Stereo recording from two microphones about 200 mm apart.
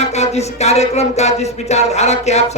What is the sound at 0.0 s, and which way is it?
Music, 35° left (ahead or behind).